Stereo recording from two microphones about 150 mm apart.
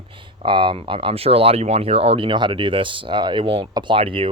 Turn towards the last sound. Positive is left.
turn(degrees=-35)  # may be behind; listen again after turning